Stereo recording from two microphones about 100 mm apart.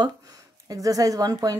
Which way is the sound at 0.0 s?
40° right (ahead or behind).